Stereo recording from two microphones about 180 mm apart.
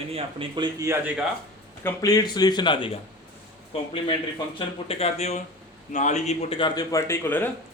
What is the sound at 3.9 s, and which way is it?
A man's voice, 30° left (ahead or behind).